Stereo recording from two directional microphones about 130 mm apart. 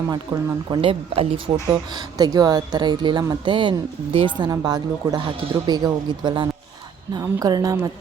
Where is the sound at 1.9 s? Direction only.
30° right (ahead or behind).